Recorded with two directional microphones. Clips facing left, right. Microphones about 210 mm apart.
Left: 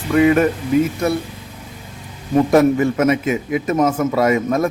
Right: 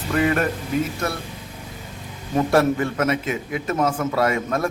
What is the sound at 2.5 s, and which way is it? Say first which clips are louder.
A man's voice: left 5 dB; 10° left (ahead or behind).